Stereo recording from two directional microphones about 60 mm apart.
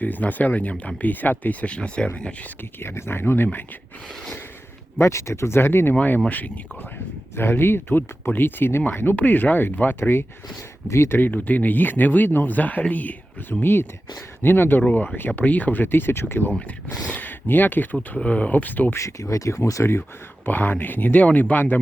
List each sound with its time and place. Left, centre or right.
0.0 s speech: left
2.8 s speech: left
4.9 s speech: left
5.9 s speech: left
7.3 s speech: left
11.2 s speech: left
18.2 s speech: left
18.9 s speech: left
19.9 s speech: left